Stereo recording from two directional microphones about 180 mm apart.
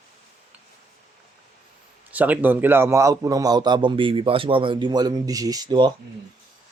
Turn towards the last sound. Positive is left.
turn(degrees=-25)  # may be behind; listen again after turning